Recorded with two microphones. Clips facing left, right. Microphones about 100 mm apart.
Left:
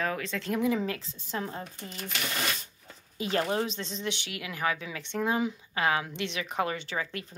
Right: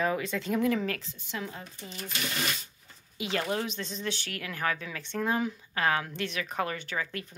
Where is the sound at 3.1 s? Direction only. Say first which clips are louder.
Left 3 dB; 40° left (ahead or behind).